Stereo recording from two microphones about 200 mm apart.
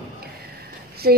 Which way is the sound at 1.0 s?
50° right (ahead or behind).